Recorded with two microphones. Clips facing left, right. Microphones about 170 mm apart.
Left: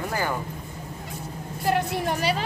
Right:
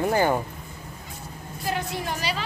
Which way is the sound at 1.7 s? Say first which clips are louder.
Left 5 dB; 60° left (ahead or behind).